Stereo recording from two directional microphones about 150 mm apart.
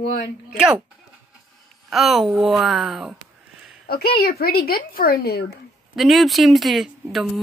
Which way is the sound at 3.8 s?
90° left.